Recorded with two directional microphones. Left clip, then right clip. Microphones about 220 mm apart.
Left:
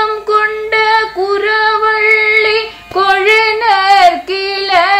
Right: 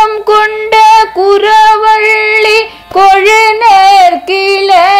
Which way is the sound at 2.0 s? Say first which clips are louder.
Right 2 dB; 35° right (ahead or behind).